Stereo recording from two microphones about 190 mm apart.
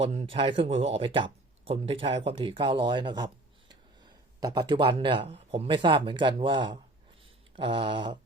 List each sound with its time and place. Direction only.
0.0 s speech: 35° right (ahead or behind)